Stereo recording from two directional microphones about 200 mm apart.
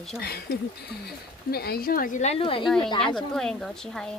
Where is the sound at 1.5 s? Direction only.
50° left (ahead or behind); by 2.6 s 30° left (ahead or behind).